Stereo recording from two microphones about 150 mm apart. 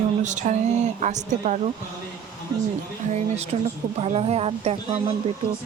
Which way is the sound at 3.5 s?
40° right (ahead or behind).